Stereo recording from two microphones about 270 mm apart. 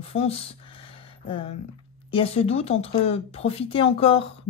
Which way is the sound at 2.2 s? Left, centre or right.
Left.